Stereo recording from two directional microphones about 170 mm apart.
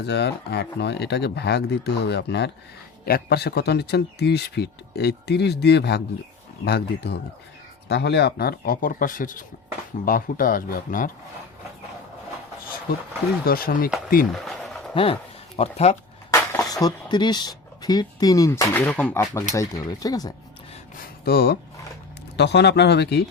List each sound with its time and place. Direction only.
0.0 s speech: 80° left
3.1 s speech: 70° left (ahead or behind); by 11.1 s 55° left (ahead or behind)
13.4 s speech: 60° left (ahead or behind)
14.3 s a sound: centre (ahead or behind)
14.9 s speech: 30° left (ahead or behind)
16.3 s speech: 20° left (ahead or behind)
20.9 s speech: 60° left (ahead or behind)
22.4 s speech: 80° left